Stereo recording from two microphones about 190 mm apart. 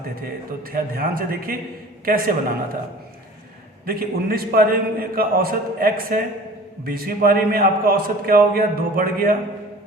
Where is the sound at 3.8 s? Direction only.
50° right (ahead or behind).